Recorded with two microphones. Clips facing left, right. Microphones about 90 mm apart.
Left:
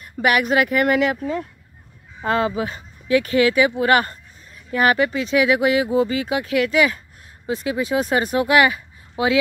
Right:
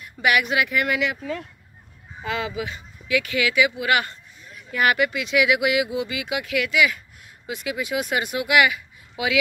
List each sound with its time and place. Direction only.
0.0 s speech: 40° left (ahead or behind)